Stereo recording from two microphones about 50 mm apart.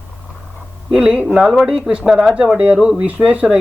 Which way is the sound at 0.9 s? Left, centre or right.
Centre.